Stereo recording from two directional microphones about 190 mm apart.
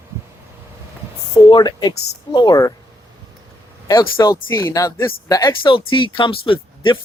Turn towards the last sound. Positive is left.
turn(degrees=25)  # may be behind; listen again after turning